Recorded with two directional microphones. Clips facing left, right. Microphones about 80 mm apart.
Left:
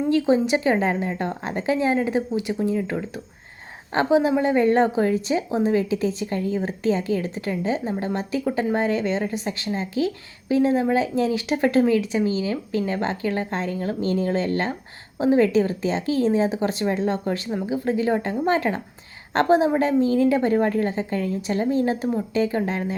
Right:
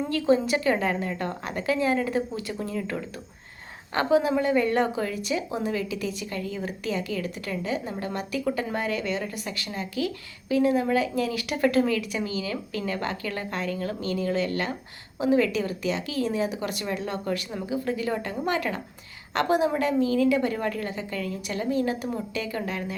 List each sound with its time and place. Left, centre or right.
0.1 s a woman's voice: left